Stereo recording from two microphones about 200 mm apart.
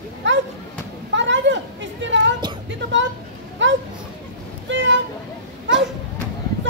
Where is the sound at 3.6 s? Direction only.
65° right (ahead or behind).